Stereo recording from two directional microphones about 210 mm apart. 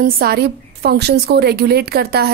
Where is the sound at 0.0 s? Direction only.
45° right (ahead or behind).